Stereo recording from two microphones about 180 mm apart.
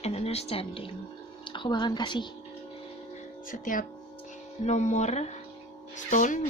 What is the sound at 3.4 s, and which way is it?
Speech, 50° left (ahead or behind).